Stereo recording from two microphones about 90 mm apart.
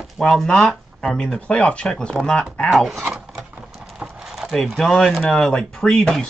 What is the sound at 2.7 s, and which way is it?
Speech, 5° right (ahead or behind).